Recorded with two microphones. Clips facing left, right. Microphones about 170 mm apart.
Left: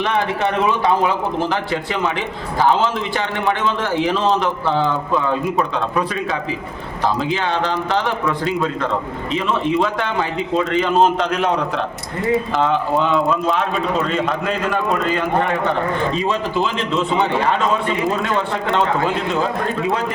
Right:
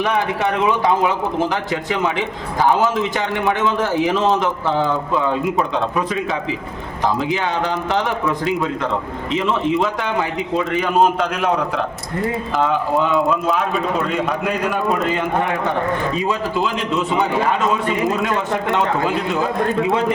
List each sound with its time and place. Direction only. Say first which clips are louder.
1.4 s a man's voice: even; 15° right (ahead or behind)
7.2 s a man's voice: even; 15° right (ahead or behind)
12.5 s a man's voice: even; 5° right (ahead or behind)
16.1 s a man's voice: left 1 dB; 5° right (ahead or behind)